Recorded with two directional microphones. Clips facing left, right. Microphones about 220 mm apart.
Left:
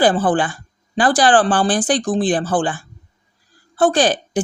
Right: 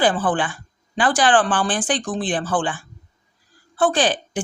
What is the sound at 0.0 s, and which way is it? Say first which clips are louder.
A woman's voice: left 4 dB; 40° left (ahead or behind).